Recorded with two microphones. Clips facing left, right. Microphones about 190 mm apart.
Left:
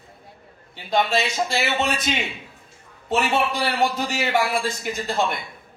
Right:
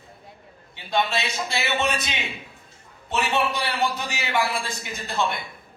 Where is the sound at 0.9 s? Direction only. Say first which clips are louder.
Left 3 dB; 45° left (ahead or behind).